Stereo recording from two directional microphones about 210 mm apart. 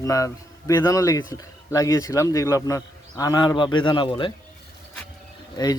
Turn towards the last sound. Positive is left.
turn(degrees=20)  # may be behind; listen again after turning